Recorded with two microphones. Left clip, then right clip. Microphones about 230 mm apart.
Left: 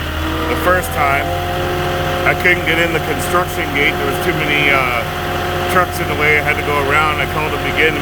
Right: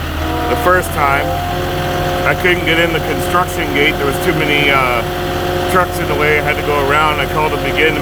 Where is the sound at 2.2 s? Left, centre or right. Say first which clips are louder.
Even; centre.